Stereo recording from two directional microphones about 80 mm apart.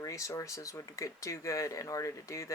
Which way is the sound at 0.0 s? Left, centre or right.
Left.